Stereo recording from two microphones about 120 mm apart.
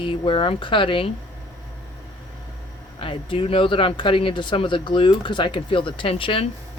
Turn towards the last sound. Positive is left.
turn(degrees=50)  # may be behind; listen again after turning